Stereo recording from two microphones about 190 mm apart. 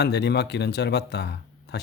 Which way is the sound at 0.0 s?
60° left (ahead or behind).